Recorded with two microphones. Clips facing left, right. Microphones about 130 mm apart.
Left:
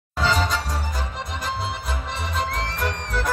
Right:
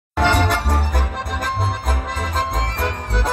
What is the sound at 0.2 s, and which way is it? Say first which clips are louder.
Music: right 5 dB; 60° right (ahead or behind).